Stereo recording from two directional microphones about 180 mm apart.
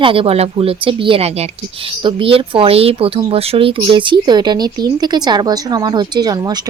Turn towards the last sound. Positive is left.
turn(degrees=-20)  # may be behind; listen again after turning